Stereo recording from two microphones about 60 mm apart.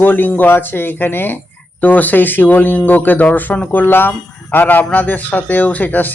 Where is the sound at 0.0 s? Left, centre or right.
Left.